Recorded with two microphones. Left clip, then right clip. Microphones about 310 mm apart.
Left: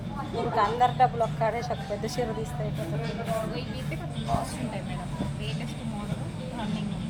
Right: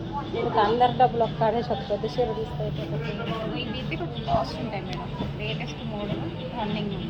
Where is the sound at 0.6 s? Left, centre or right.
Left.